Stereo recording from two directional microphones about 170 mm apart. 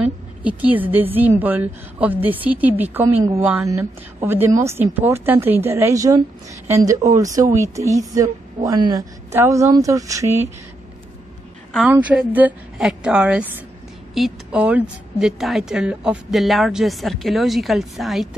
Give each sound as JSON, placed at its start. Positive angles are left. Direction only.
{"t": 0.4, "sound": "a woman's voice", "side_deg": -10}
{"t": 11.9, "sound": "a woman's voice", "side_deg": -10}